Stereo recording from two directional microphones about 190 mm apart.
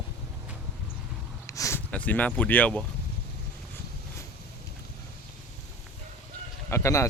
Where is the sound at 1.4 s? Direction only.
15° left (ahead or behind).